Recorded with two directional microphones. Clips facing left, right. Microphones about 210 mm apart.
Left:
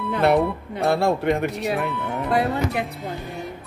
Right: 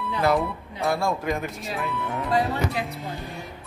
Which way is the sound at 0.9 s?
65° left (ahead or behind).